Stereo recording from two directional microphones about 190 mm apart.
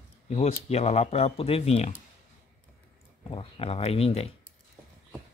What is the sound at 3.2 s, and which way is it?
Speech, 30° left (ahead or behind).